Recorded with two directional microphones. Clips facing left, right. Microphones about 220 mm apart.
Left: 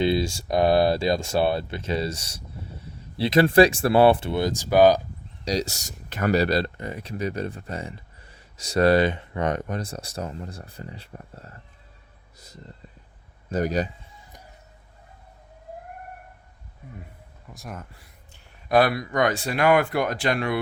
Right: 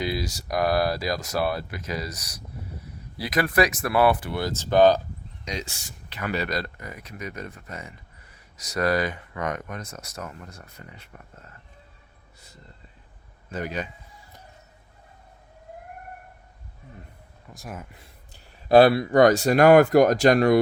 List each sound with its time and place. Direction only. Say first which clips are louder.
0.0 s speech: left 6 dB; 25° left (ahead or behind); by 4.9 s 10° left (ahead or behind)
5.5 s speech: left 8 dB; 40° left (ahead or behind)
13.5 s speech: left 6 dB; 40° left (ahead or behind)
17.5 s speech: even; 5° right (ahead or behind)
18.7 s speech: right 5 dB; 30° right (ahead or behind)